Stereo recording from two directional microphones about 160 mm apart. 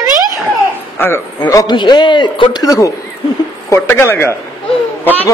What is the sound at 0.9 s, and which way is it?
A man's voice, 15° left (ahead or behind).